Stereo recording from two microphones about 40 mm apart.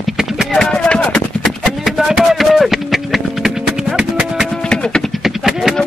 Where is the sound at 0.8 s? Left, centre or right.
Left.